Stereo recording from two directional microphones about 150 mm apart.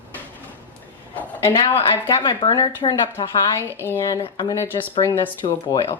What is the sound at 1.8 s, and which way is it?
A woman's voice, 30° left (ahead or behind).